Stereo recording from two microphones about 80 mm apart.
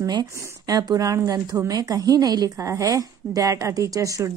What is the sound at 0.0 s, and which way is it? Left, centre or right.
Speech, right.